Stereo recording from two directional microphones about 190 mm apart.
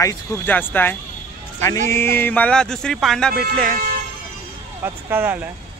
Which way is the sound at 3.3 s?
50° right (ahead or behind).